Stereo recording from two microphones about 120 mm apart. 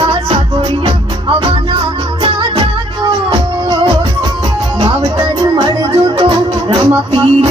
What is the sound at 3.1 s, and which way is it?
Music, 40° right (ahead or behind).